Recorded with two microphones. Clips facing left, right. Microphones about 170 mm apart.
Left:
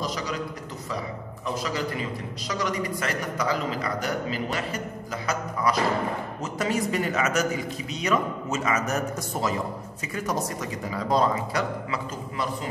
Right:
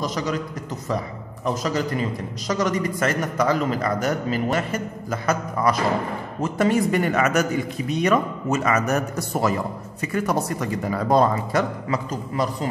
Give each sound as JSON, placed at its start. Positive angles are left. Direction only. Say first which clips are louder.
{"t": 0.0, "sound": "a man's voice", "louder": "right 5 dB", "side_deg": -45}
{"t": 1.4, "sound": "a man's voice", "louder": "right 5 dB", "side_deg": -45}